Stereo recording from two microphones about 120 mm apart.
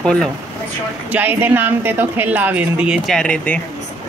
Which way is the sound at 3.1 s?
5° left (ahead or behind).